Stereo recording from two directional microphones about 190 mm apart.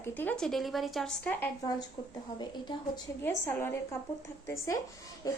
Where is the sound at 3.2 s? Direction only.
10° left (ahead or behind).